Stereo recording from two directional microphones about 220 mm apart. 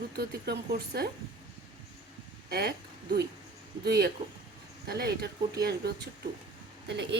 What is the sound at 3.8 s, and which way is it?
A woman's voice, 45° right (ahead or behind).